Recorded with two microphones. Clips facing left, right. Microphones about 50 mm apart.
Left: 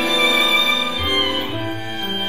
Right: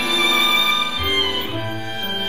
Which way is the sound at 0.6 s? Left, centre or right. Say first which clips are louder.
Even; left.